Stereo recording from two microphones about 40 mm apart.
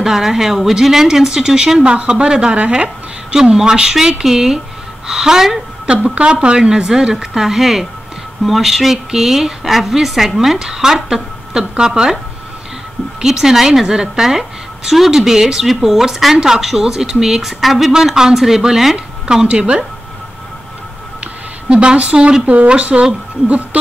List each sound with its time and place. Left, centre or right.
0.0 s a woman's voice: centre
5.9 s a woman's voice: right
13.2 s a woman's voice: centre
14.9 s a woman's voice: centre
17.9 s speech: centre
18.9 s a woman's voice: right
21.6 s a woman's voice: right
22.1 s a woman's voice: right